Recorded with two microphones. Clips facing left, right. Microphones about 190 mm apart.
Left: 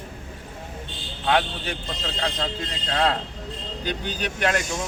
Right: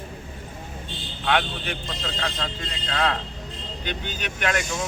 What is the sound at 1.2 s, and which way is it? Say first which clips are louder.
Speech: left 2 dB; 30° left (ahead or behind).